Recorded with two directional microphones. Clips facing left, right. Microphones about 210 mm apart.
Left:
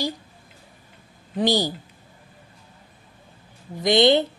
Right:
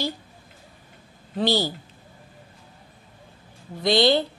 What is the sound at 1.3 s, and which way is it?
Speech, 15° left (ahead or behind).